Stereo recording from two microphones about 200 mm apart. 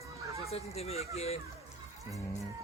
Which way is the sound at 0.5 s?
30° left (ahead or behind).